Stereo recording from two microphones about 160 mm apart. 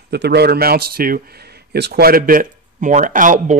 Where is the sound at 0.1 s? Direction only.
90° right.